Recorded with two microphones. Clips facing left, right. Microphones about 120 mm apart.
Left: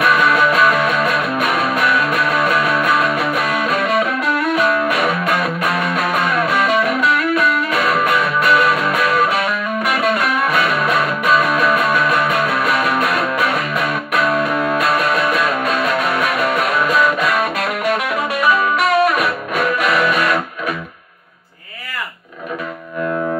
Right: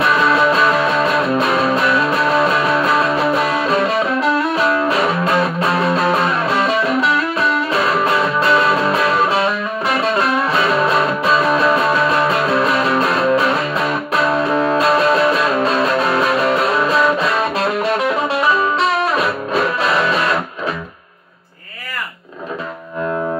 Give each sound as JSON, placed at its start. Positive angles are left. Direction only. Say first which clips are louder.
{"t": 0.0, "sound": "music", "louder": "even", "side_deg": -30}